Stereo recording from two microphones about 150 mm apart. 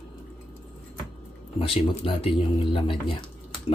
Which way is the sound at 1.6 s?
35° left (ahead or behind).